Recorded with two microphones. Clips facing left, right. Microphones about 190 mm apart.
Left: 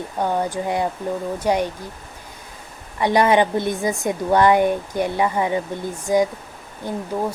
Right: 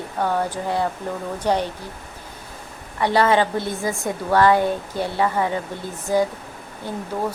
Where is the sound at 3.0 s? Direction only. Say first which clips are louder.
Left 2 dB; 15° left (ahead or behind).